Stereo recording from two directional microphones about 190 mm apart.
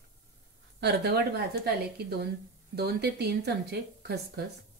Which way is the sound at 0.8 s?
60° right (ahead or behind).